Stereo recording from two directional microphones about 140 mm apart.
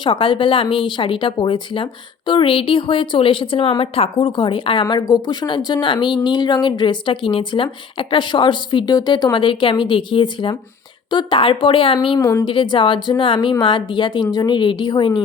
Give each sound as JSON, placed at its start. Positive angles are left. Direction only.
{"t": 0.0, "sound": "speech", "side_deg": 40}
{"t": 12.2, "sound": "a woman's voice", "side_deg": 20}
{"t": 12.5, "sound": "speech", "side_deg": 35}